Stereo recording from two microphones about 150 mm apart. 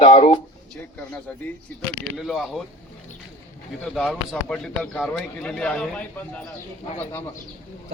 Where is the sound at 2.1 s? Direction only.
Centre (ahead or behind).